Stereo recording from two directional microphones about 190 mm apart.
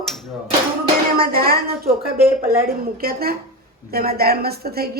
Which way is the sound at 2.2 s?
10° right (ahead or behind).